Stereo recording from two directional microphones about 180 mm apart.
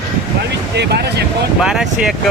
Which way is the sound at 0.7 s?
65° right (ahead or behind).